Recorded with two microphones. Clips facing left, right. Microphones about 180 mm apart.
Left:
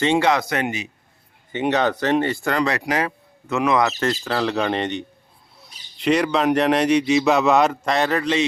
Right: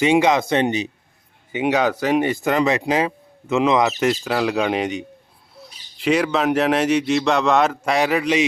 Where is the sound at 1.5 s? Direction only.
10° right (ahead or behind).